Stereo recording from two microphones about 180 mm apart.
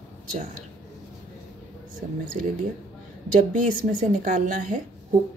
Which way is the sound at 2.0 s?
45° right (ahead or behind).